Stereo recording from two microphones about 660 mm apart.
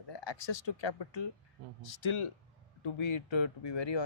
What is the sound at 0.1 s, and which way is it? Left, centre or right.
Speech, left.